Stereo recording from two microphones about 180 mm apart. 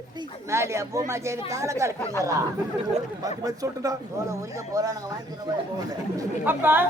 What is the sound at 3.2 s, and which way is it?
A man's voice, 20° right (ahead or behind).